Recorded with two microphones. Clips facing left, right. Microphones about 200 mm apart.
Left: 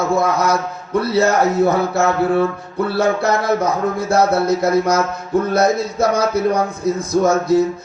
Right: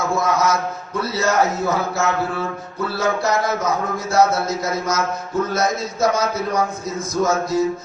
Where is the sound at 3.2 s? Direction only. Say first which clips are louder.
Left 4 dB; 60° left (ahead or behind).